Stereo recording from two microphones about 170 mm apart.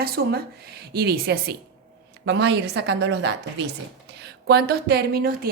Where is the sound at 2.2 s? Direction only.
85° right.